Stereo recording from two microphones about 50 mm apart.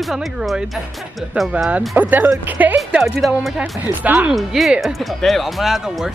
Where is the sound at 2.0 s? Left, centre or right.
Right.